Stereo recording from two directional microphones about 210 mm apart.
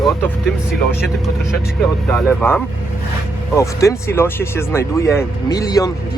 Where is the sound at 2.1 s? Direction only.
5° left (ahead or behind).